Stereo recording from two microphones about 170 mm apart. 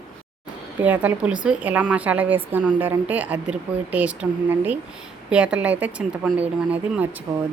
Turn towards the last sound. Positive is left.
turn(degrees=-15)  # may be behind; listen again after turning